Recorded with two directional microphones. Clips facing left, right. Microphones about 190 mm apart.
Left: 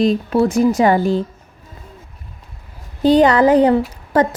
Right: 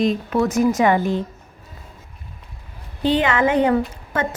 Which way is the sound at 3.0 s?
40° left (ahead or behind).